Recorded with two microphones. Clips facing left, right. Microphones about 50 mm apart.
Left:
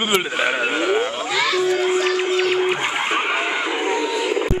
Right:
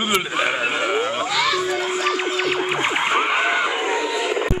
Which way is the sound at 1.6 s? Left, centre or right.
Right.